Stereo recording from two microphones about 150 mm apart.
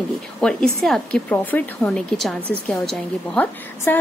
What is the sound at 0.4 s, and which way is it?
A woman's voice, 5° left (ahead or behind).